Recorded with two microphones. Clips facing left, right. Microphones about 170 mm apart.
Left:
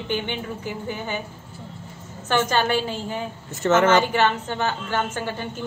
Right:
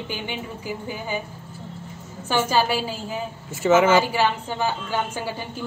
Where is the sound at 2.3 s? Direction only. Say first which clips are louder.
Even; 5° right (ahead or behind).